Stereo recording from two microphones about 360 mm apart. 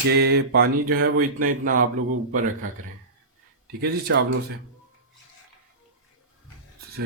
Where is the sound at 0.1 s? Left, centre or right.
Right.